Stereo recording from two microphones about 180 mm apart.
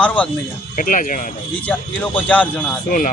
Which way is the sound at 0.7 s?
50° left (ahead or behind).